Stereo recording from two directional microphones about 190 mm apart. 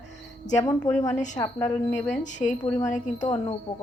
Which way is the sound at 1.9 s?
40° left (ahead or behind).